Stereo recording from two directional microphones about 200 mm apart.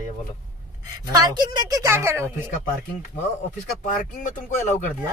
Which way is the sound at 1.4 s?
15° right (ahead or behind).